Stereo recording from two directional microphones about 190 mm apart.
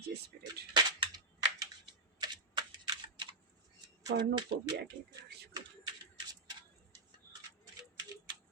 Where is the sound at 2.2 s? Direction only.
25° right (ahead or behind).